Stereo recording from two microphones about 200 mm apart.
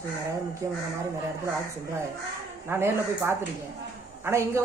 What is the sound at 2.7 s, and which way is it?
Speech, 10° right (ahead or behind).